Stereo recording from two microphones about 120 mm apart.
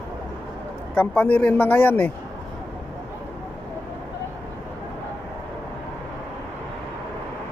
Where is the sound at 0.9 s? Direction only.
10° left (ahead or behind).